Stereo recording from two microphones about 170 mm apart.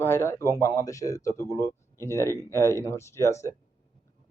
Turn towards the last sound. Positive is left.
turn(degrees=15)  # may be behind; listen again after turning